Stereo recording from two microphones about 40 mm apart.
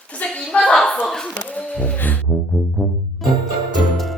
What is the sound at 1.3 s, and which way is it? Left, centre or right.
Speech, left.